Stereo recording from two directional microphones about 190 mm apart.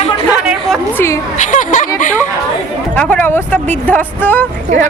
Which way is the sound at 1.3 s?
40° left (ahead or behind).